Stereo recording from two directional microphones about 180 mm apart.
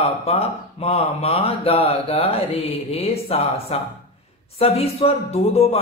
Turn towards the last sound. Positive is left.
turn(degrees=35)  # may be behind; listen again after turning